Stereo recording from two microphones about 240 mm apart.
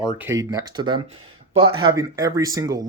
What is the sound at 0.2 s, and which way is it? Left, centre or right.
Speech, centre.